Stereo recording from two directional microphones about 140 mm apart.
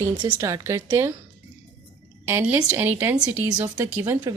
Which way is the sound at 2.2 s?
10° right (ahead or behind).